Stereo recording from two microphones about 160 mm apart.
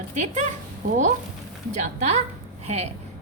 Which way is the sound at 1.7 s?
45° right (ahead or behind).